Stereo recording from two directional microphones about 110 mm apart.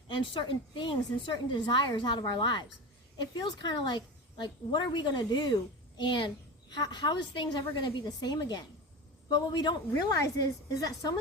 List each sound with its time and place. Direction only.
0.3 s a woman's voice: 50° left (ahead or behind)